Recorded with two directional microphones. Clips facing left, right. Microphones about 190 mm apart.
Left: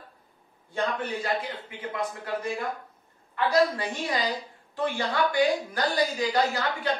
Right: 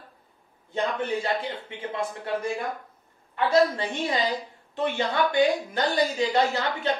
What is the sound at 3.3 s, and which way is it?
A woman's voice, 25° right (ahead or behind).